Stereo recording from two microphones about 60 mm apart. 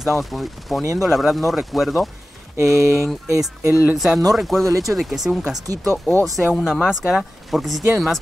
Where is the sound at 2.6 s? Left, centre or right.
Right.